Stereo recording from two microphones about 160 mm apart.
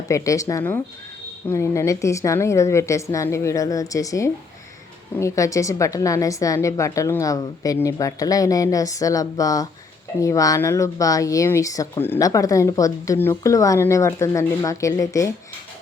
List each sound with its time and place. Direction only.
0.1 s speech: 20° left (ahead or behind)